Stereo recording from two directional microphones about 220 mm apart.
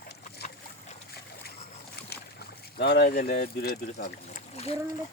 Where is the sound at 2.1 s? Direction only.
50° left (ahead or behind).